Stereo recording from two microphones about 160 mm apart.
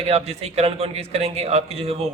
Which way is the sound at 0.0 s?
40° right (ahead or behind).